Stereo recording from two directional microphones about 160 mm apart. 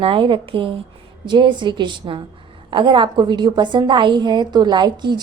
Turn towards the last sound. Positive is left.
turn(degrees=-25)  # may be behind; listen again after turning